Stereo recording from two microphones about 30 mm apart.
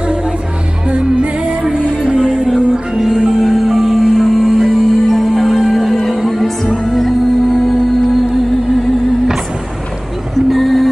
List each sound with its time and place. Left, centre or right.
0.8 s music: right; by 4.1 s centre
4.2 s music: centre
10.3 s music: centre